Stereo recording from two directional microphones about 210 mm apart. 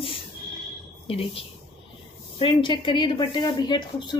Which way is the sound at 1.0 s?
25° left (ahead or behind).